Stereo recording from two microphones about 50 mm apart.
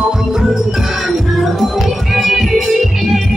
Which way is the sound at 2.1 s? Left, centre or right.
Centre.